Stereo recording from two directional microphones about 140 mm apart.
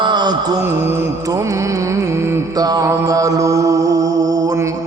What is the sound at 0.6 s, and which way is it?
Music, 15° right (ahead or behind).